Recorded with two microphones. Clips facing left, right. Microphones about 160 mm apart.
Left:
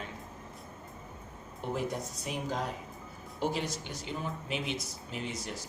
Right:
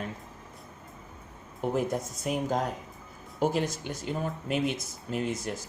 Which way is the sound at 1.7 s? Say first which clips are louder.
Right 4 dB; 50° right (ahead or behind).